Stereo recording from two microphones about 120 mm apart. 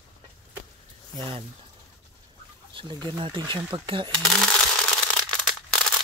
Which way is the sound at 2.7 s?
40° right (ahead or behind).